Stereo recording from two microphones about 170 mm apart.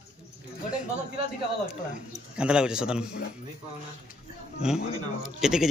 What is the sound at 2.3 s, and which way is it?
Speech, 5° right (ahead or behind).